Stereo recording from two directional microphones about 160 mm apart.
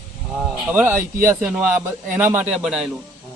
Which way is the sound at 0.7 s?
15° right (ahead or behind).